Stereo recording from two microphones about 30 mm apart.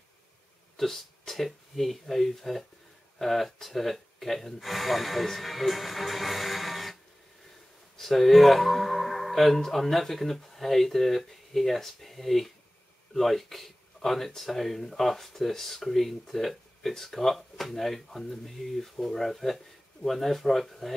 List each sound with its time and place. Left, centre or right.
0.7 s speech: centre
8.0 s speech: centre